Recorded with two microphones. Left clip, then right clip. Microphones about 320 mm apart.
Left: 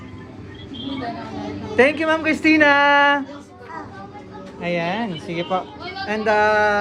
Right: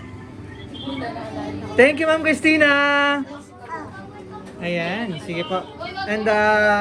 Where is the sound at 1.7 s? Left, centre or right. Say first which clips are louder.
Right 1 dB; left.